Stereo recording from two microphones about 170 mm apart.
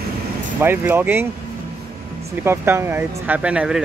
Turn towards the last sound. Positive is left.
turn(degrees=-5)  # may be behind; listen again after turning